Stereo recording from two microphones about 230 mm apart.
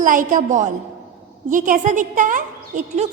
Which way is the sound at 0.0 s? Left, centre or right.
Right.